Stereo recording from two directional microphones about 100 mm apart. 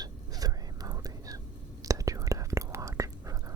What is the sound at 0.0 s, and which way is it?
Whispering, 40° right (ahead or behind).